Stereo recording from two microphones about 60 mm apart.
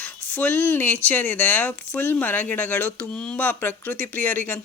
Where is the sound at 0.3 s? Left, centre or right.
Left.